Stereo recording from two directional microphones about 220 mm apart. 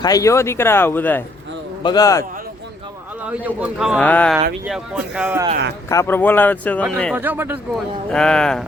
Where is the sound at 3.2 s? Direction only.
5° right (ahead or behind).